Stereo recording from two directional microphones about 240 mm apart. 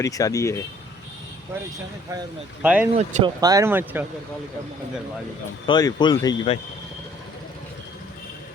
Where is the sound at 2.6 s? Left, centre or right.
Centre.